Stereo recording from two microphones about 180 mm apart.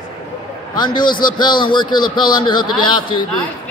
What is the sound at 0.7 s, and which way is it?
A man's voice, 25° left (ahead or behind).